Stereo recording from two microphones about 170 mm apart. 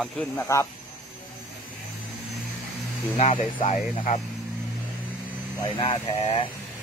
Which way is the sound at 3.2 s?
40° left (ahead or behind).